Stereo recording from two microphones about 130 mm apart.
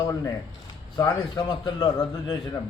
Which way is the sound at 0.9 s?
35° left (ahead or behind).